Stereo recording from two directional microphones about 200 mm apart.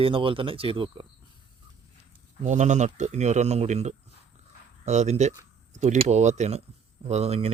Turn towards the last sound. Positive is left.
turn(degrees=-30)  # may be behind; listen again after turning